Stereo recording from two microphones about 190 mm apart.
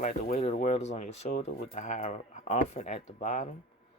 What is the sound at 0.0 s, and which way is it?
Speech, 40° left (ahead or behind).